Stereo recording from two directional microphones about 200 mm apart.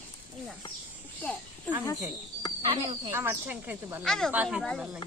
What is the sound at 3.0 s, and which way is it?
Speech, 10° right (ahead or behind).